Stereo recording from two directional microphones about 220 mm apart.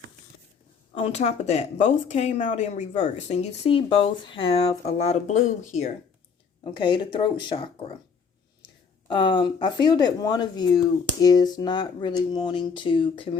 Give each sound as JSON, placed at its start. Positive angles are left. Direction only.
{"t": 0.9, "sound": "speech", "side_deg": 30}
{"t": 6.7, "sound": "speech", "side_deg": 20}
{"t": 9.0, "sound": "speech", "side_deg": 20}